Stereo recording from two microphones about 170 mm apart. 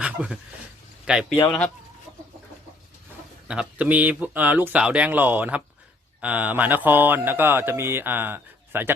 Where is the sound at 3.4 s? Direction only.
5° right (ahead or behind).